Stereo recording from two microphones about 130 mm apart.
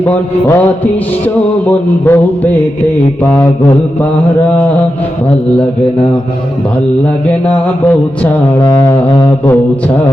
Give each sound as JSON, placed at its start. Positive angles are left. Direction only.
{"t": 0.0, "sound": "mantra", "side_deg": 15}
{"t": 2.0, "sound": "mantra", "side_deg": 15}
{"t": 7.3, "sound": "mantra", "side_deg": 10}
{"t": 8.6, "sound": "music", "side_deg": 30}